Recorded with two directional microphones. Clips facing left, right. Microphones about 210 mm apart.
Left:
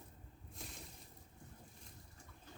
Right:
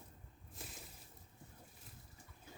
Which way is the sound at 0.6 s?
5° right (ahead or behind).